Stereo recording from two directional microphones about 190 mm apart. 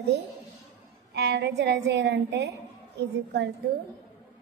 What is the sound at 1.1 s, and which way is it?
A woman's voice, 65° right (ahead or behind).